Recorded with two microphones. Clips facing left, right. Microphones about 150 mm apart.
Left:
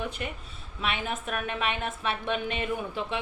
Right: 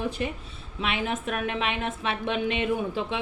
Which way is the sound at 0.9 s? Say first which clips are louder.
Right 4 dB; 30° right (ahead or behind).